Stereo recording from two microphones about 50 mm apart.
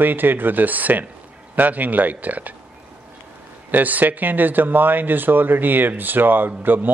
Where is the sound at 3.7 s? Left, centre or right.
Right.